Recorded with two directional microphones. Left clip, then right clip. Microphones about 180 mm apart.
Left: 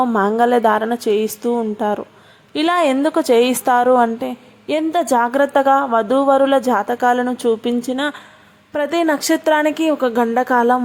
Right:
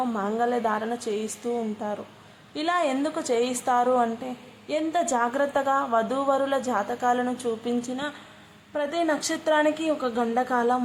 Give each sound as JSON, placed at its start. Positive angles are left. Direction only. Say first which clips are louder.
{"t": 0.0, "sound": "a woman's voice", "louder": "left 11 dB", "side_deg": 45}